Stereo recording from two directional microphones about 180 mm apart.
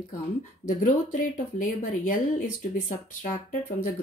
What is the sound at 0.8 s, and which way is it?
Speech, 45° left (ahead or behind).